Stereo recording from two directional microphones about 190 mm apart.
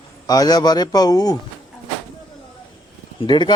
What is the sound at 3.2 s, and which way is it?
Speech, 25° left (ahead or behind).